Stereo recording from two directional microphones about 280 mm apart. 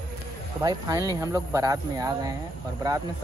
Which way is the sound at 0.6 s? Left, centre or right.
Centre.